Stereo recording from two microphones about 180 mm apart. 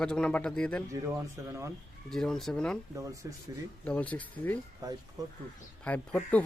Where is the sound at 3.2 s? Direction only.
15° right (ahead or behind).